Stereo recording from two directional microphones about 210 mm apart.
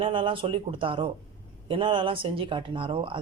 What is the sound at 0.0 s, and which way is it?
Speech, 25° right (ahead or behind).